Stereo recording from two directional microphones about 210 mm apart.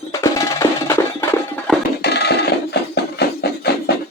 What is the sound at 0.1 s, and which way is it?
Music, 15° left (ahead or behind).